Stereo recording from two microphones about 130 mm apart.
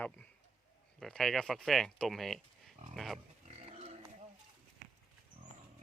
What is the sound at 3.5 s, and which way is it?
Pig, 50° right (ahead or behind).